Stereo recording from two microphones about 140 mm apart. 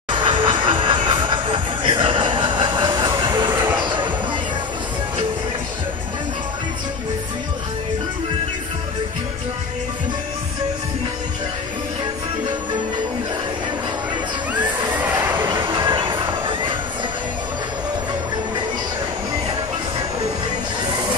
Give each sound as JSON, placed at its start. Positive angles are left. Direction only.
{"t": 0.2, "sound": "train", "side_deg": -35}
{"t": 3.2, "sound": "vehicle", "side_deg": -35}
{"t": 3.4, "sound": "vehicle", "side_deg": -15}
{"t": 3.8, "sound": "a sound", "side_deg": -35}
{"t": 15.0, "sound": "music", "side_deg": -15}
{"t": 15.6, "sound": "a sound", "side_deg": -35}